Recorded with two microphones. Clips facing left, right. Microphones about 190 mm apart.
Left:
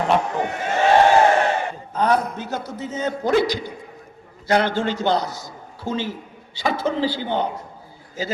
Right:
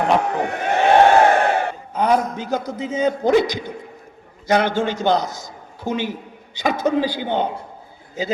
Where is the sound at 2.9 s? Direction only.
15° right (ahead or behind).